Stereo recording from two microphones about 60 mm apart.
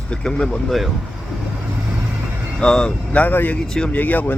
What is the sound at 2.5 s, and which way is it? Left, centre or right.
Speech, centre.